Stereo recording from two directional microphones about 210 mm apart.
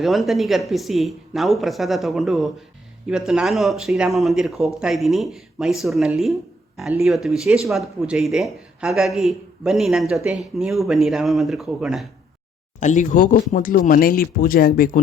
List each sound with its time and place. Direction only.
0.0 s speech: centre (ahead or behind)
12.8 s speech: 35° left (ahead or behind)